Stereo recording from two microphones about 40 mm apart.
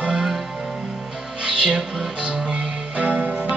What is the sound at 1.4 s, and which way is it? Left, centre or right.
Music, right.